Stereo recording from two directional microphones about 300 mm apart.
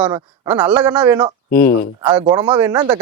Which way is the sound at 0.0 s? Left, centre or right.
Centre.